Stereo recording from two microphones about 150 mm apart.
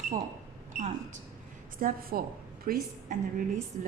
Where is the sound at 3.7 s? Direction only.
60° right (ahead or behind).